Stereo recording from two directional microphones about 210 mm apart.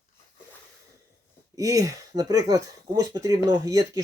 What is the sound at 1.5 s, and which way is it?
Speech, 15° right (ahead or behind).